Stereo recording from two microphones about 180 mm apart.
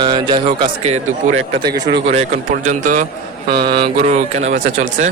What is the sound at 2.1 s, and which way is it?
A man's voice, 40° right (ahead or behind).